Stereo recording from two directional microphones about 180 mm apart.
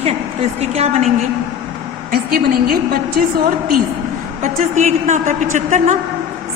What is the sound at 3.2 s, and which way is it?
Speech, 55° right (ahead or behind).